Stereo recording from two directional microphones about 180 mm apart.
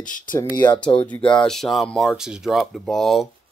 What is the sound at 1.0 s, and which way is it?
Speech, 5° left (ahead or behind).